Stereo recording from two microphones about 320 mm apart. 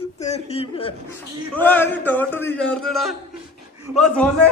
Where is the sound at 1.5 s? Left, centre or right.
Centre.